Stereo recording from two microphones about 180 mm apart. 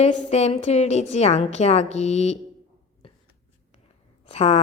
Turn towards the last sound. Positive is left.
turn(degrees=35)  # may be behind; listen again after turning